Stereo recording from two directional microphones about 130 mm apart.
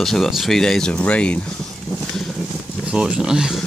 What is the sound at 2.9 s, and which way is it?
Speech, 5° right (ahead or behind).